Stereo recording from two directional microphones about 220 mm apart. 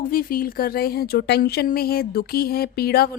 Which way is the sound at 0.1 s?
40° left (ahead or behind).